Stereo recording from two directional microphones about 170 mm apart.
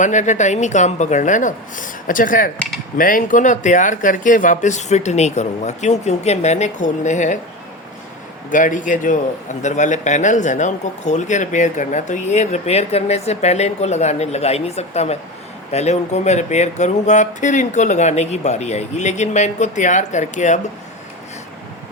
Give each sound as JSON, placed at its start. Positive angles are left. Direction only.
{"t": 0.0, "sound": "a man's voice", "side_deg": 45}
{"t": 8.4, "sound": "a man's voice", "side_deg": 50}